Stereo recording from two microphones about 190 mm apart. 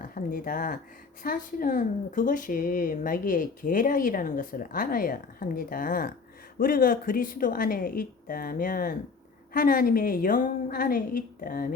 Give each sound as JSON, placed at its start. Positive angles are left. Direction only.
{"t": 0.0, "sound": "speech", "side_deg": 45}